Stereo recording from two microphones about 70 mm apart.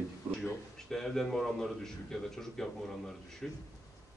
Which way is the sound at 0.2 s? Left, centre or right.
Right.